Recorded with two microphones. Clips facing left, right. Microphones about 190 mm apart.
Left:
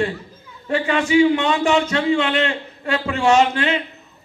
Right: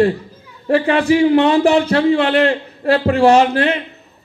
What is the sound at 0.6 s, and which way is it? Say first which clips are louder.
A man's voice: right 6 dB; 35° right (ahead or behind).